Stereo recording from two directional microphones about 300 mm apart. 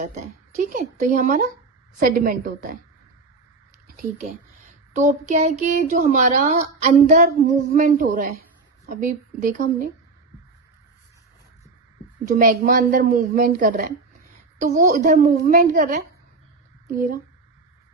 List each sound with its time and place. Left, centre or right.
0.0 s speech: right
3.8 s speech: right
12.3 s speech: right